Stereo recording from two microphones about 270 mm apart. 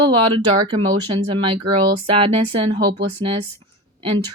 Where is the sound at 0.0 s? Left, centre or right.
Centre.